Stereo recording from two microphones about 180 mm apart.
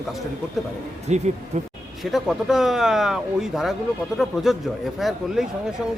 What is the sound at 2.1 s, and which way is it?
Speech, centre (ahead or behind).